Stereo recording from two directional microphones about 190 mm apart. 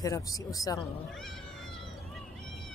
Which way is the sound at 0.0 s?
20° left (ahead or behind).